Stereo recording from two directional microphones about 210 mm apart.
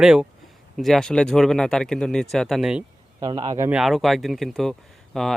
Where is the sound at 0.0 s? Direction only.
5° right (ahead or behind).